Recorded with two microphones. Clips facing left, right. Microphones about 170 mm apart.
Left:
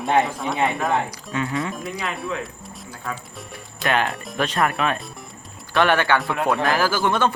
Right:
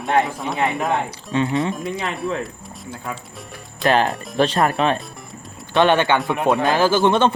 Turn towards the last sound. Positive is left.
turn(degrees=-25)  # may be behind; listen again after turning